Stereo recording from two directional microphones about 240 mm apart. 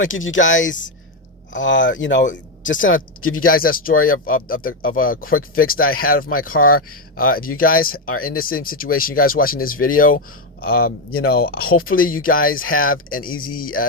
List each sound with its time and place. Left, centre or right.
0.0 s speech: left
3.4 s speech: left
4.9 s speech: left
5.4 s speech: left
11.1 s speech: left
11.3 s speech: left